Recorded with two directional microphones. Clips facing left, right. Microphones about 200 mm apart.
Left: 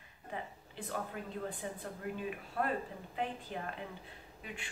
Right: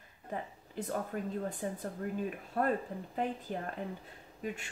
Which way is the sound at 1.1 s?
45° right (ahead or behind).